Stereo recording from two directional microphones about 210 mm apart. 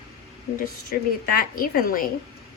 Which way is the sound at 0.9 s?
40° left (ahead or behind).